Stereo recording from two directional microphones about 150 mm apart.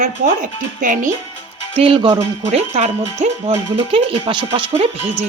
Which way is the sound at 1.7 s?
40° right (ahead or behind).